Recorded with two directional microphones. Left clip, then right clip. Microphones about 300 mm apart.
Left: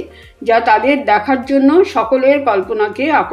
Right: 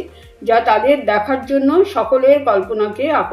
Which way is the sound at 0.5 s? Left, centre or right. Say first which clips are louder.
Left 1 dB; left.